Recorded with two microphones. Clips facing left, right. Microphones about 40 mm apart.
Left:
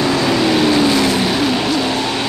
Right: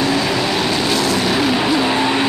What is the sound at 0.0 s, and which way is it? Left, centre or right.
Vehicle, centre.